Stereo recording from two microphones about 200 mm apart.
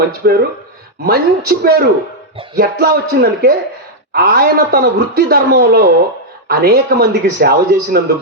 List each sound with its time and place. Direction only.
0.2 s a man's voice: 50° right (ahead or behind)